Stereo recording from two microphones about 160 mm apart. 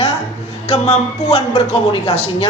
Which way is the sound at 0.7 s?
40° left (ahead or behind).